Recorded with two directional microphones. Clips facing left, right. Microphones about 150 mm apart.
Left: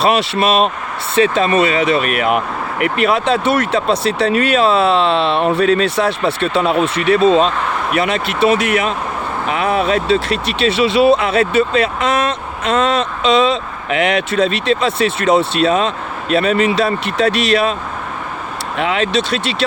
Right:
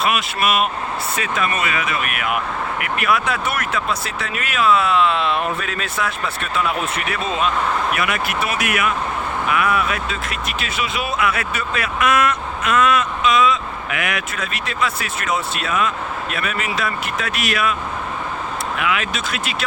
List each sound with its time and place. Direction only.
0.0 s speech: 30° left (ahead or behind)
18.8 s speech: 30° left (ahead or behind)